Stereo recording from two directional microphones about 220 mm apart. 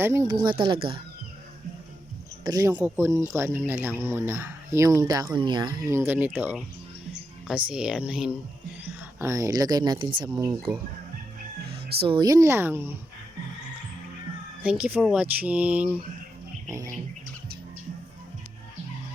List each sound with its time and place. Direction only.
0.0 s speech: 10° right (ahead or behind)
2.4 s speech: 15° right (ahead or behind)
12.0 s speech: 20° right (ahead or behind)
14.6 s speech: 5° right (ahead or behind)